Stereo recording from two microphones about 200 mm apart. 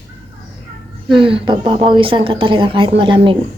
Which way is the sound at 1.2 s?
25° right (ahead or behind).